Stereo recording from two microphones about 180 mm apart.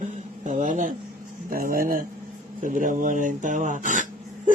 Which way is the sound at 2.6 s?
45° right (ahead or behind).